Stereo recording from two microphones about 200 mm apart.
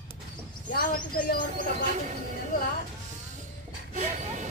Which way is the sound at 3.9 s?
35° right (ahead or behind).